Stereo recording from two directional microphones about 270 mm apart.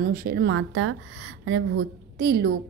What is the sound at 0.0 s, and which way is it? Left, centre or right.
A woman's voice, right.